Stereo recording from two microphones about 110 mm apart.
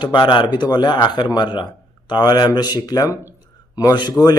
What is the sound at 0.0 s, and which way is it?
A man's voice, 40° left (ahead or behind).